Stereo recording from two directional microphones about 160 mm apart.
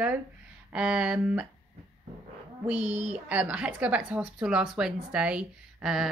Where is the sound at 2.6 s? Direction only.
10° right (ahead or behind).